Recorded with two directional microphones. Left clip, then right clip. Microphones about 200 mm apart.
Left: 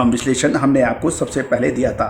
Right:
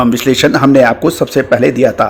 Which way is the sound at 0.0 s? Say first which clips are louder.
Right 7 dB; 35° right (ahead or behind).